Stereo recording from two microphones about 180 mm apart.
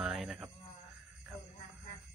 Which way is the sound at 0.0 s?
5° right (ahead or behind).